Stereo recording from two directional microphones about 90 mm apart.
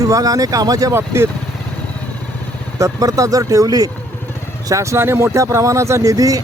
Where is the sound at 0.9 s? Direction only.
25° right (ahead or behind).